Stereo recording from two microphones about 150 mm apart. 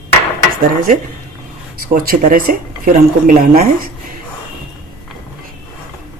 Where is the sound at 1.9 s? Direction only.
70° right (ahead or behind).